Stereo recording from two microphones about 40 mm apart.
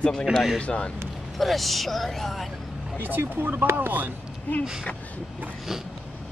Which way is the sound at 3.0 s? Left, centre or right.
Right.